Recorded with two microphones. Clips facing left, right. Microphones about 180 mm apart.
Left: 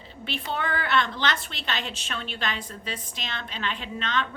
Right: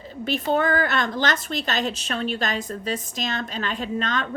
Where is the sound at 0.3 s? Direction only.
45° right (ahead or behind).